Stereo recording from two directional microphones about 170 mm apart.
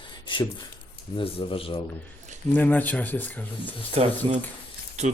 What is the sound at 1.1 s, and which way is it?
Speech, 30° left (ahead or behind).